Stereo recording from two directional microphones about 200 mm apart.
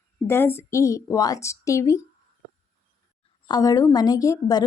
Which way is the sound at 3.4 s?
20° left (ahead or behind).